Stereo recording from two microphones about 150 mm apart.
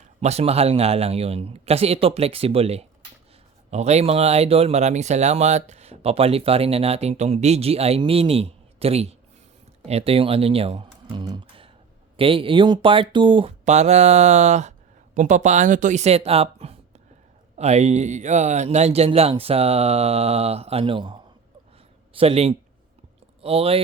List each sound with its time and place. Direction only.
0.2 s speech: 45° right (ahead or behind)
13.7 s speech: 50° right (ahead or behind)